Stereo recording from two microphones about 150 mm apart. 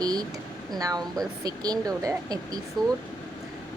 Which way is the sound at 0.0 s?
25° right (ahead or behind).